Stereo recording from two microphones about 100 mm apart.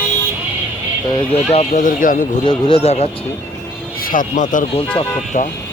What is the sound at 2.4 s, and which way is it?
Speech, 70° left (ahead or behind).